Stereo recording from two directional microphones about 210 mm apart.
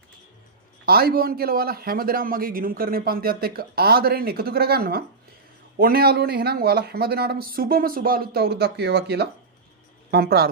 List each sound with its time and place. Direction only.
0.8 s a man's voice: 45° right (ahead or behind)